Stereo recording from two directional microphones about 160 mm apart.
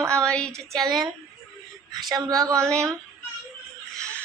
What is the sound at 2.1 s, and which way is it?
Speech, 25° right (ahead or behind).